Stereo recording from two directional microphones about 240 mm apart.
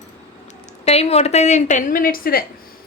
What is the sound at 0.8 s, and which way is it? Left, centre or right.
Speech, left.